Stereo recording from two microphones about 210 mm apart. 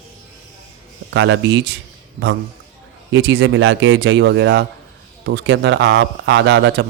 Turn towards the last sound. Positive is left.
turn(degrees=-55)  # may be behind; listen again after turning